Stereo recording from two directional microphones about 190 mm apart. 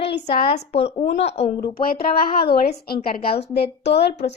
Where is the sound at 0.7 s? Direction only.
30° left (ahead or behind).